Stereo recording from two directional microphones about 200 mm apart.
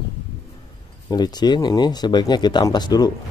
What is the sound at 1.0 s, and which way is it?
Speech, 20° left (ahead or behind).